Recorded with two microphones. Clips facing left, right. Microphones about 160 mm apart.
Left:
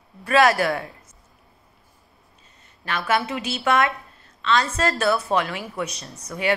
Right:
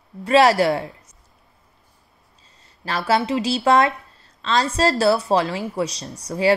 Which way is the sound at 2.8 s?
30° right (ahead or behind).